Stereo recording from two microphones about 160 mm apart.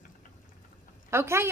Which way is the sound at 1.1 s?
15° right (ahead or behind).